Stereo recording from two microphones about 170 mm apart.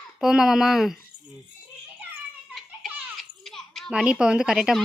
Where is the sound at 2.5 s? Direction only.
5° right (ahead or behind).